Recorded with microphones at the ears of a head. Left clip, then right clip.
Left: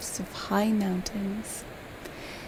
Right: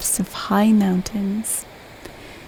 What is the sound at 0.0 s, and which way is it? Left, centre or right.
Speech, right.